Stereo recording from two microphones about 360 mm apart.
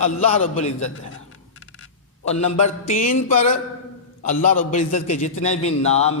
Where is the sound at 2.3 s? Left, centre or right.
Centre.